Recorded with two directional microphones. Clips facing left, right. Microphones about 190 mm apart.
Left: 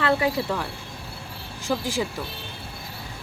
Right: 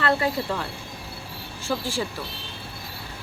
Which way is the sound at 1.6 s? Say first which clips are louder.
Left 2 dB; 15° left (ahead or behind).